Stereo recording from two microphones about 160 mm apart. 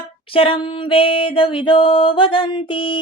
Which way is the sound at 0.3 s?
35° left (ahead or behind).